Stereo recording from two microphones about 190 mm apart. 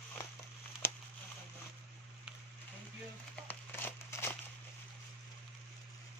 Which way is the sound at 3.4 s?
10° left (ahead or behind).